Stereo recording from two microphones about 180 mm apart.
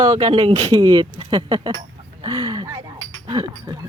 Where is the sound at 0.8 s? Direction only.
25° right (ahead or behind).